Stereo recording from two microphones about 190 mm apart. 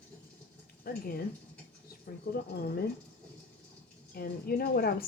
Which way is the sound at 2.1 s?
55° left (ahead or behind).